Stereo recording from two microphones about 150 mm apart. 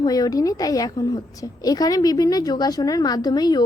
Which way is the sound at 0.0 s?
25° left (ahead or behind).